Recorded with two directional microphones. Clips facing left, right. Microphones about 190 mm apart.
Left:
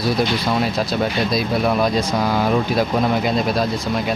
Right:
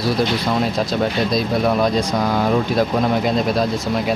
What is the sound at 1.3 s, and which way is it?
Speech, 5° left (ahead or behind).